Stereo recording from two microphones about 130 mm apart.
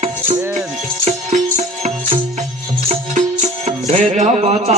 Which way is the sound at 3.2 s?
65° right (ahead or behind).